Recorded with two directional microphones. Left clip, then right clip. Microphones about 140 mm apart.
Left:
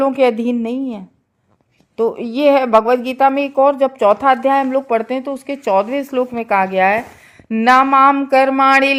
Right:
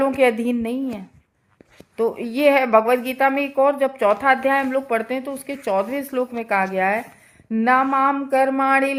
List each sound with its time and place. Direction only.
0.0 s speech: 40° left (ahead or behind)